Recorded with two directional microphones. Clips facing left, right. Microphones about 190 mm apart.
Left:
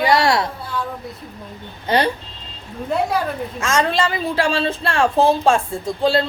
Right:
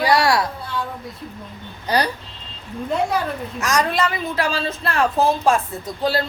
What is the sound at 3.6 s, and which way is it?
Speech, 25° left (ahead or behind).